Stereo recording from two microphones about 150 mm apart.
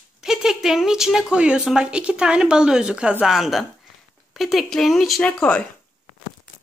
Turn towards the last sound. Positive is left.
turn(degrees=10)  # may be behind; listen again after turning